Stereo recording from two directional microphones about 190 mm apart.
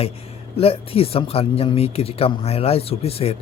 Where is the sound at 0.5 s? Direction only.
30° left (ahead or behind).